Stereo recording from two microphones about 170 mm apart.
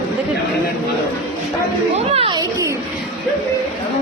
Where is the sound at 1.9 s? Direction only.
35° right (ahead or behind).